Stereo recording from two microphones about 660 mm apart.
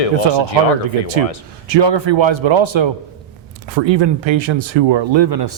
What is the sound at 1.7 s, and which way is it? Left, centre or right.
Speech, right.